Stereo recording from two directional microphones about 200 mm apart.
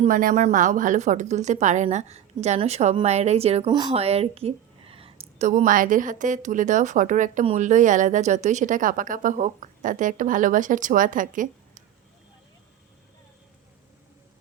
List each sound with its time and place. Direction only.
0.0 s a woman's voice: 40° right (ahead or behind)
5.5 s a woman's voice: 40° right (ahead or behind)